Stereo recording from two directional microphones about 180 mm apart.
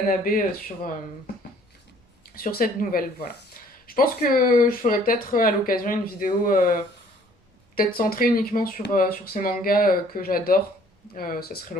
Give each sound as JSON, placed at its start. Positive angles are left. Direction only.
{"t": 0.1, "sound": "speech", "side_deg": 50}
{"t": 2.2, "sound": "speech", "side_deg": 55}
{"t": 7.8, "sound": "speech", "side_deg": 55}